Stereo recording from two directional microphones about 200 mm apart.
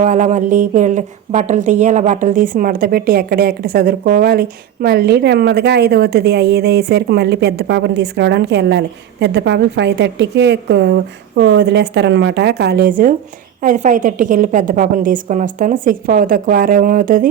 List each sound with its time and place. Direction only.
0.0 s a woman's voice: 35° right (ahead or behind)